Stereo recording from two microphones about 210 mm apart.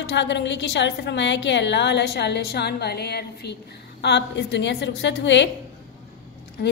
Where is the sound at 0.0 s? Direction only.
55° left (ahead or behind).